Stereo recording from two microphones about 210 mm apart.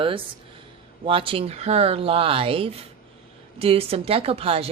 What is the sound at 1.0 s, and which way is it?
Speech, 25° right (ahead or behind).